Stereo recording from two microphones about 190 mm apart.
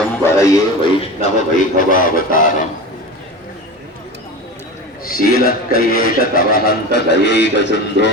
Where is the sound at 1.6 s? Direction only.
45° left (ahead or behind).